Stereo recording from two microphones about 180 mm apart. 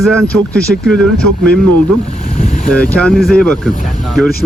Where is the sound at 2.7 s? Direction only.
5° left (ahead or behind).